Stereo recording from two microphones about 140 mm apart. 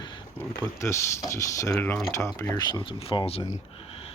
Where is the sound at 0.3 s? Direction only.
20° left (ahead or behind).